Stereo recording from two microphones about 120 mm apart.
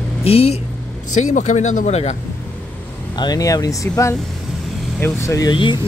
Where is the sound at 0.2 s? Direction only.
60° left (ahead or behind).